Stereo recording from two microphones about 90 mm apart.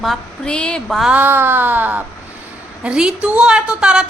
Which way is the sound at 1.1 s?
20° right (ahead or behind).